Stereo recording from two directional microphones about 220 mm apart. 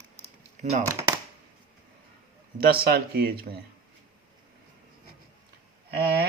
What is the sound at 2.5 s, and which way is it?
A man's voice, 45° right (ahead or behind).